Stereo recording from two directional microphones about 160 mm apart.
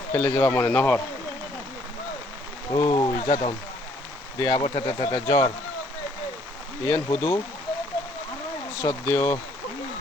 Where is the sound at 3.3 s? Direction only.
35° left (ahead or behind).